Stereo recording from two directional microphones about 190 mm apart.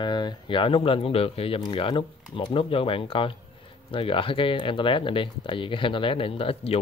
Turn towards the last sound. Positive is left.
turn(degrees=30)  # may be behind; listen again after turning